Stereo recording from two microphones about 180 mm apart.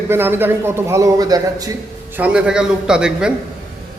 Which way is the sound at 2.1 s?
5° right (ahead or behind).